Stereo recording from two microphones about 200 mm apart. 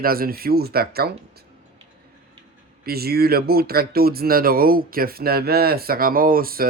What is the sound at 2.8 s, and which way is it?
Speech, 50° right (ahead or behind).